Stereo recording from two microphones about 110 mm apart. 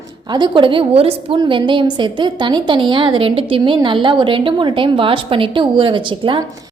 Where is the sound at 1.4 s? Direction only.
45° right (ahead or behind).